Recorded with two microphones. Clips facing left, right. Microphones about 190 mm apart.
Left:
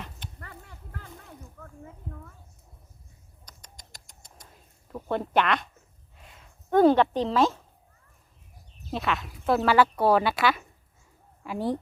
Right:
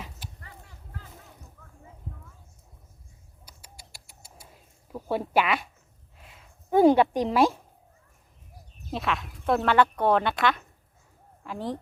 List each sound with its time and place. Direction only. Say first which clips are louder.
0.3 s a sound: left 4 dB; 60° left (ahead or behind)
3.4 s bird: right 1 dB; 10° right (ahead or behind)
4.9 s speech: even; 5° right (ahead or behind)
8.9 s speech: left 1 dB; centre (ahead or behind)